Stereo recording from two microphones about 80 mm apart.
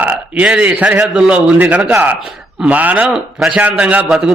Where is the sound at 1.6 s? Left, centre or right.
Right.